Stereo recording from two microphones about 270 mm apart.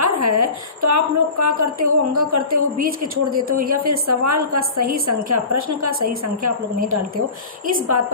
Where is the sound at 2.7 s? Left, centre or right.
Right.